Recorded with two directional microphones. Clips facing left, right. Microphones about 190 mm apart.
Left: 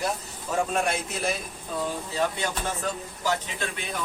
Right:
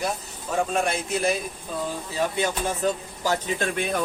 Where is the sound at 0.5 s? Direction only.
Centre (ahead or behind).